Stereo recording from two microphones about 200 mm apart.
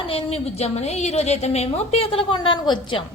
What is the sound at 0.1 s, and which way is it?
A woman's voice, 30° left (ahead or behind).